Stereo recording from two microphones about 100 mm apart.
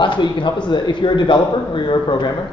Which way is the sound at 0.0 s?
50° left (ahead or behind).